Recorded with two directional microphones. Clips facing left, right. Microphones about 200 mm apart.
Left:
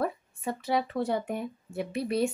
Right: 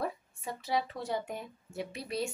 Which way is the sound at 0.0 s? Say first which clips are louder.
Left 6 dB; 60° left (ahead or behind).